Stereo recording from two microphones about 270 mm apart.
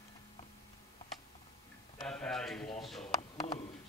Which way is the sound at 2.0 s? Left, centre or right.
Centre.